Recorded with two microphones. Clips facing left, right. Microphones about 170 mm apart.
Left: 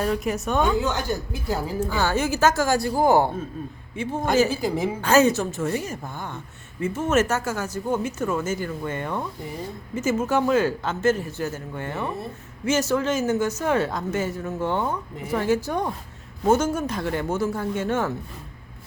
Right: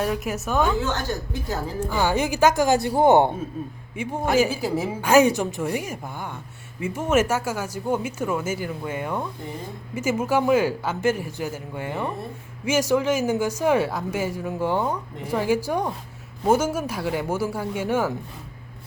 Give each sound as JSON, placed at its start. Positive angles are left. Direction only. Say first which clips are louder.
{"t": 0.0, "sound": "a woman's voice", "louder": "left 1 dB", "side_deg": -5}
{"t": 0.7, "sound": "a woman's voice", "louder": "left 1 dB", "side_deg": 15}
{"t": 2.0, "sound": "a woman's voice", "louder": "right 2 dB", "side_deg": -15}